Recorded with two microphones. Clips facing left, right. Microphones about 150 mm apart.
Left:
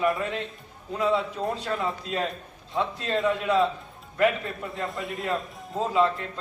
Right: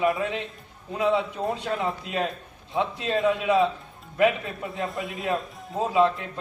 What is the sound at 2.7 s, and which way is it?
Speech, 15° right (ahead or behind).